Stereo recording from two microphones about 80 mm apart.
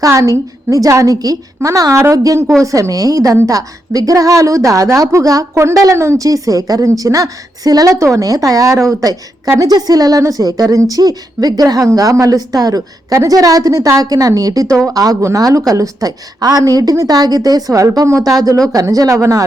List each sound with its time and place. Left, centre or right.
0.0 s a woman's voice: right
9.6 s a woman's voice: right